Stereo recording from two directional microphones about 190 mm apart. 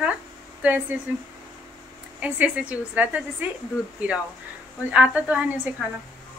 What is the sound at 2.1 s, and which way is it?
A woman's voice, 5° right (ahead or behind).